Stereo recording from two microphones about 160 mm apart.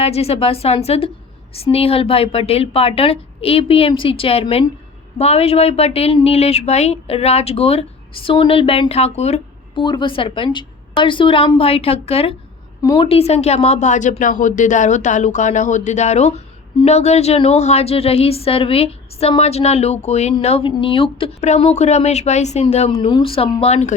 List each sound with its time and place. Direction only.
0.0 s a woman's voice: 40° left (ahead or behind)
9.8 s a woman's voice: 30° left (ahead or behind)
23.0 s a woman's voice: 30° left (ahead or behind)